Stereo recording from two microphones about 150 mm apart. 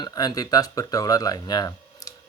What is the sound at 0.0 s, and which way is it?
Speech, 25° left (ahead or behind).